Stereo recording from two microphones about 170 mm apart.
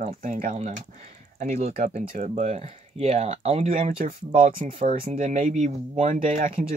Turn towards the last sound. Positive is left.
turn(degrees=-45)  # may be behind; listen again after turning